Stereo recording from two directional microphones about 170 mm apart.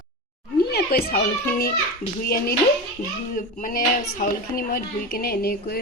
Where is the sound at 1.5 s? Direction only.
65° left (ahead or behind).